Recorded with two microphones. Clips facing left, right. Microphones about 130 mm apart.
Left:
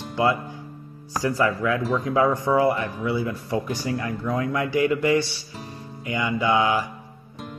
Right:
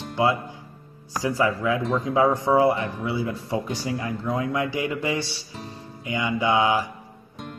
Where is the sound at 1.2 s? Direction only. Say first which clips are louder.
Even; 20° right (ahead or behind).